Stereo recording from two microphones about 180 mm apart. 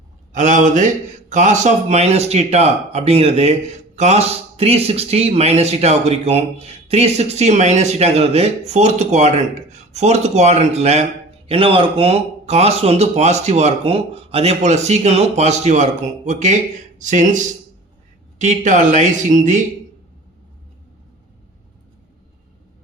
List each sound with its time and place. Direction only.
0.3 s speech: 45° right (ahead or behind)